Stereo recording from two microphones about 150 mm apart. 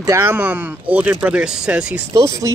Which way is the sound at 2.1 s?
20° right (ahead or behind).